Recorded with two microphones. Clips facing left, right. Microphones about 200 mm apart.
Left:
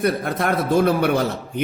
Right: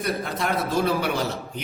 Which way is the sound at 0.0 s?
55° left (ahead or behind).